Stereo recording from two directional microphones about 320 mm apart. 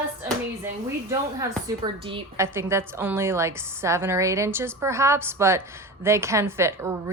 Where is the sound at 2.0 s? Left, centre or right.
Centre.